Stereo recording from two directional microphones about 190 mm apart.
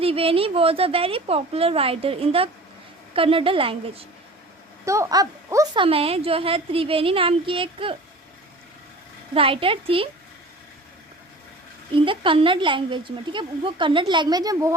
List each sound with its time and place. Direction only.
0.0 s a woman's voice: 30° right (ahead or behind)
4.9 s speech: 15° right (ahead or behind)
5.8 s a woman's voice: 30° right (ahead or behind)
9.3 s a woman's voice: 30° right (ahead or behind)
11.9 s a woman's voice: 25° right (ahead or behind)